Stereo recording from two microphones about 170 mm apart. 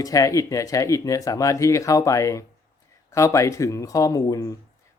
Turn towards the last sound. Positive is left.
turn(degrees=20)  # may be behind; listen again after turning